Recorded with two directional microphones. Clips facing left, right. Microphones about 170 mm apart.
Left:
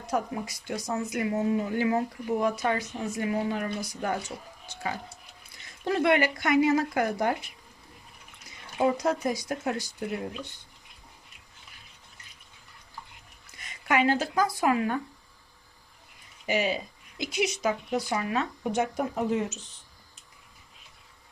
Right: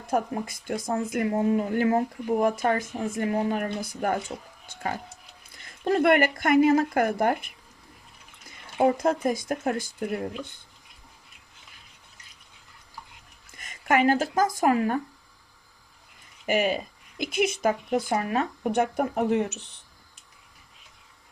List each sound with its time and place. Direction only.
0.0 s speech: 50° right (ahead or behind)
8.8 s speech: 50° right (ahead or behind)
13.5 s speech: 50° right (ahead or behind)
16.5 s speech: 50° right (ahead or behind)